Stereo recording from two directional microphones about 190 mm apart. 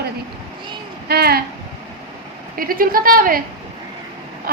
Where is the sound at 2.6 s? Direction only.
50° right (ahead or behind).